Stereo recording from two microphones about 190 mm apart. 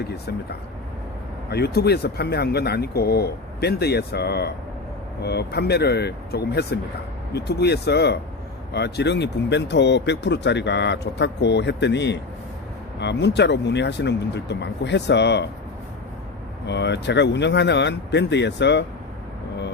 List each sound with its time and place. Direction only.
0.0 s speech: 60° left (ahead or behind)
1.5 s speech: 60° left (ahead or behind)
16.6 s speech: 65° left (ahead or behind)